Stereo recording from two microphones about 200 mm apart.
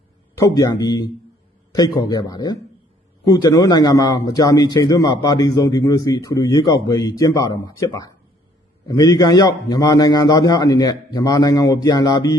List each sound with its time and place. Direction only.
0.3 s a man's voice: 15° left (ahead or behind)